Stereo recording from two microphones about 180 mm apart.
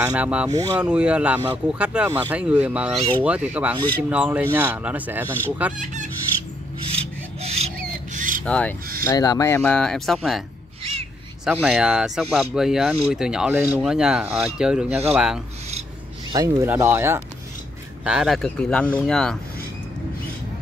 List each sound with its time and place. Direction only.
0.1 s speech: 5° right (ahead or behind)
0.5 s speech: 20° right (ahead or behind)
0.7 s speech: 5° right (ahead or behind)
6.9 s a sound: 35° right (ahead or behind)
8.5 s speech: 5° left (ahead or behind)
9.0 s speech: 20° left (ahead or behind); by 10.4 s centre (ahead or behind)
11.4 s speech: 5° right (ahead or behind)
16.3 s speech: 20° right (ahead or behind)
18.0 s speech: 5° right (ahead or behind)